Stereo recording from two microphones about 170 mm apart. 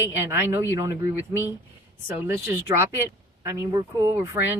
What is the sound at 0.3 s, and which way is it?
A woman's voice, 15° right (ahead or behind).